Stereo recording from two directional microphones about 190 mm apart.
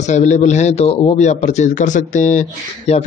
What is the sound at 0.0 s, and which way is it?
A man's voice, 40° left (ahead or behind).